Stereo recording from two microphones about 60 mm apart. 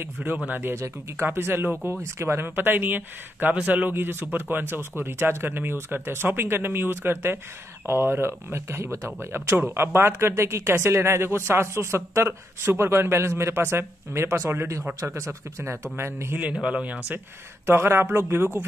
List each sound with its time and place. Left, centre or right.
0.0 s speech: right
0.7 s speech: right
1.2 s speech: right
2.5 s speech: right
3.9 s speech: right
16.6 s speech: right
17.6 s speech: right